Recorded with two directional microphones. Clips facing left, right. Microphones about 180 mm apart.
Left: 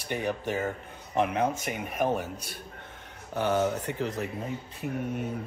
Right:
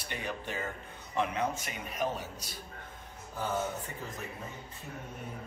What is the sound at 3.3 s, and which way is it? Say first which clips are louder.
A man's voice: left 8 dB; 75° left (ahead or behind).